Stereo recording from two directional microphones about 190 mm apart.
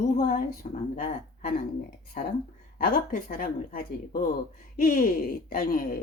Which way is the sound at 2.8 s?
50° left (ahead or behind).